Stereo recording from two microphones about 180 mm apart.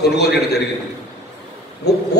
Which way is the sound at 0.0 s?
65° left (ahead or behind).